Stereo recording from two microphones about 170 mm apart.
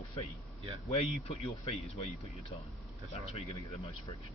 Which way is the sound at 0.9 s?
35° left (ahead or behind).